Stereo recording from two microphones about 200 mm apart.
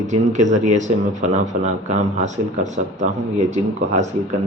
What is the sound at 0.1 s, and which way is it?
Speech, 35° right (ahead or behind).